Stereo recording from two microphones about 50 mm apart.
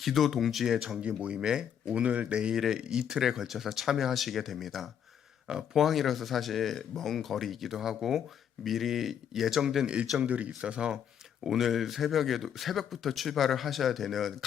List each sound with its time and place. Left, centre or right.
0.0 s speech: centre
1.0 s speech: right; by 9.8 s centre
9.8 s speech: centre
11.4 s speech: centre